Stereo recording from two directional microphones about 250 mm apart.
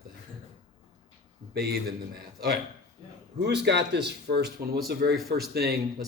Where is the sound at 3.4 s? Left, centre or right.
Right.